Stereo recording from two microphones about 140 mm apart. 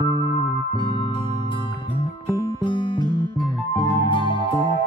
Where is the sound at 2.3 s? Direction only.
35° left (ahead or behind).